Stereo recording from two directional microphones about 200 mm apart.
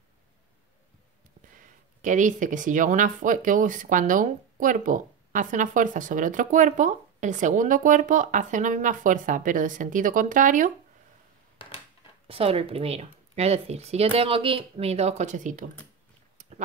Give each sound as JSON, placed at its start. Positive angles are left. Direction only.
{"t": 2.0, "sound": "speech", "side_deg": -40}
{"t": 12.3, "sound": "speech", "side_deg": -30}
{"t": 16.3, "sound": "a sound", "side_deg": -35}